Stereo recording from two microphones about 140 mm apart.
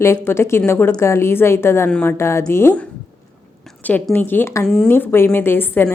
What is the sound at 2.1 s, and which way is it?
Speech, 20° left (ahead or behind).